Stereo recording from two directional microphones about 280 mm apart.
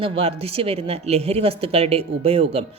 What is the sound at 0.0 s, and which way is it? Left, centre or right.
Speech, centre.